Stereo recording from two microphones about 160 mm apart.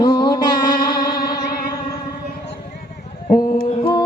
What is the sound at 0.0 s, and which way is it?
Music, 30° left (ahead or behind).